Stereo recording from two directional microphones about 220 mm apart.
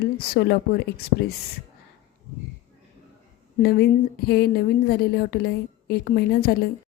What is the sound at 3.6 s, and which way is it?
A woman's voice, 45° left (ahead or behind).